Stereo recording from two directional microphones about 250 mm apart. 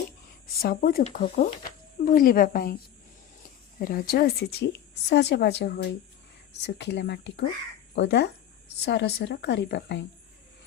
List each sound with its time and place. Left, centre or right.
0.6 s a woman's voice: left
3.8 s a woman's voice: left